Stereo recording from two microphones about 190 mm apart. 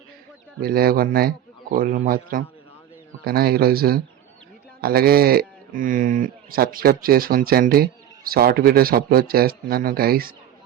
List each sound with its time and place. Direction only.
0.6 s speech: 50° right (ahead or behind)